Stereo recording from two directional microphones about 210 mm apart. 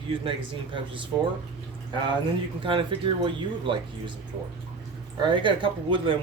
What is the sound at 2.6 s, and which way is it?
Speech, 25° right (ahead or behind).